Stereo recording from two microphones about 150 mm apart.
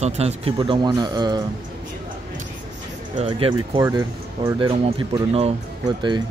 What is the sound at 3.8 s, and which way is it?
Speech, 20° right (ahead or behind).